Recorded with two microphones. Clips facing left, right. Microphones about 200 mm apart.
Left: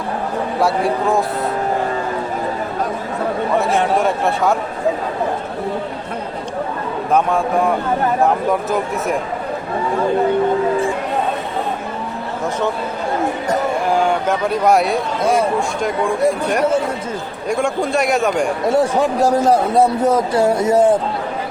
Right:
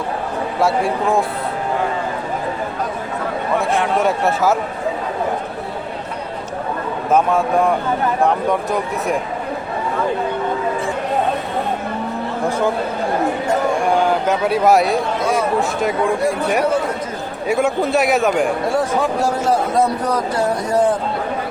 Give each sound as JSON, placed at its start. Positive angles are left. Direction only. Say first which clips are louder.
{"t": 3.9, "sound": "speech", "louder": "even", "side_deg": 0}
{"t": 7.1, "sound": "speech", "louder": "right 1 dB", "side_deg": 0}
{"t": 13.9, "sound": "speech", "louder": "even", "side_deg": 0}
{"t": 15.2, "sound": "speech", "louder": "left 3 dB", "side_deg": 55}
{"t": 15.8, "sound": "speech", "louder": "left 3 dB", "side_deg": -5}
{"t": 19.2, "sound": "a man's voice", "louder": "left 4 dB", "side_deg": 35}